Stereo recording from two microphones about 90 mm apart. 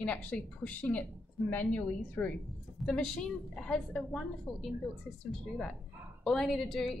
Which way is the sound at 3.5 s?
5° left (ahead or behind).